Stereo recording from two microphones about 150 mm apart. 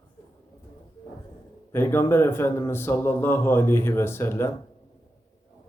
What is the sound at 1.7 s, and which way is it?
Speech, 15° left (ahead or behind).